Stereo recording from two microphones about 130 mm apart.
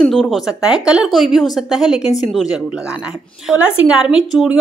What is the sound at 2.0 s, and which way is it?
Speech, 60° left (ahead or behind).